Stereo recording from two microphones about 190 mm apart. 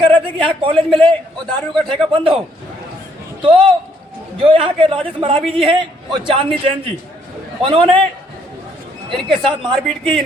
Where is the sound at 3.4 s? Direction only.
30° right (ahead or behind).